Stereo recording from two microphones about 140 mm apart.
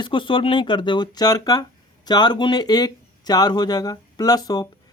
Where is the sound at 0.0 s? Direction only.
35° left (ahead or behind).